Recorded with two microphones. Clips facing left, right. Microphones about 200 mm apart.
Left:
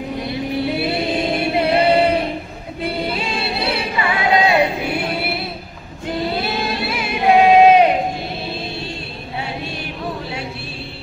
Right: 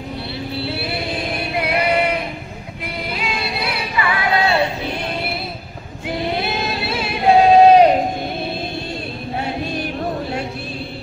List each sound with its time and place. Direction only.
0.3 s music: 20° left (ahead or behind)
7.0 s singing: 35° right (ahead or behind)